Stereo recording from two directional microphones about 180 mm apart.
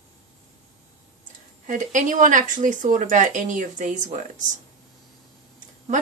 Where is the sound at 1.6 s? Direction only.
45° right (ahead or behind).